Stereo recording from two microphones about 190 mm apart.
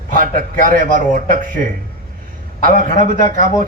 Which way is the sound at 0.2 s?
45° right (ahead or behind).